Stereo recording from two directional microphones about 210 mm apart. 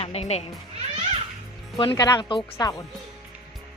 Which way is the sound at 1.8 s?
20° left (ahead or behind).